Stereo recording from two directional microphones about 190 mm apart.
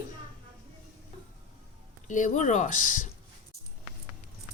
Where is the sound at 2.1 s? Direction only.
40° left (ahead or behind).